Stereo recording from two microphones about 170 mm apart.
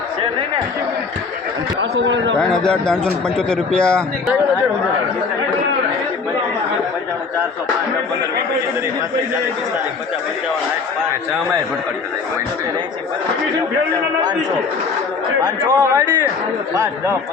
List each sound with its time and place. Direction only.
1.8 s a man's voice: 90° right
2.4 s a man's voice: 5° left (ahead or behind)
15.4 s speech: 20° right (ahead or behind)